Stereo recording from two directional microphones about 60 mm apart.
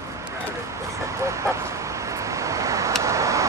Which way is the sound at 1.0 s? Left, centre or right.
Right.